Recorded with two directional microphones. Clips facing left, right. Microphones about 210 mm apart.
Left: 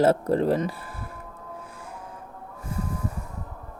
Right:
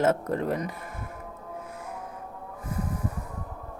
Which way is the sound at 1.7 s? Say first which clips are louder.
Right 3 dB; 30° left (ahead or behind).